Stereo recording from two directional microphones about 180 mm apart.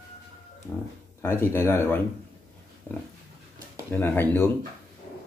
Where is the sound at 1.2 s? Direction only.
10° left (ahead or behind).